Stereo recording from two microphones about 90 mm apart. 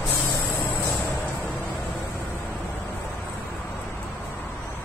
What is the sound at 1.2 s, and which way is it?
Vehicle, 20° left (ahead or behind).